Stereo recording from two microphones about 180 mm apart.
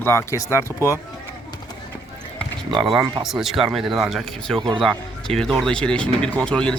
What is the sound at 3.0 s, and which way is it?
Speech, 25° right (ahead or behind).